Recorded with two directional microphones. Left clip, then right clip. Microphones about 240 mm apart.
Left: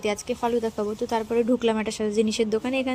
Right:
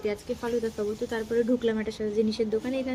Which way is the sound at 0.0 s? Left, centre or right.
Left.